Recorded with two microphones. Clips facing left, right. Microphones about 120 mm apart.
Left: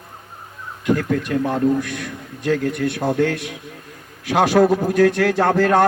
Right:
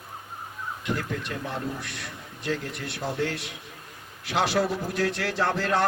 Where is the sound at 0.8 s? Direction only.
55° left (ahead or behind).